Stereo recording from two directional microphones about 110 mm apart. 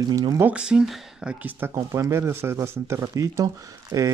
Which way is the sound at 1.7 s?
30° right (ahead or behind).